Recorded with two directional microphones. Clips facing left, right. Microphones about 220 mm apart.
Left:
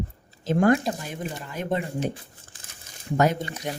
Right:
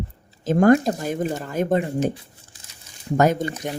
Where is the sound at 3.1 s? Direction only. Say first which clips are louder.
Right 4 dB; 45° right (ahead or behind).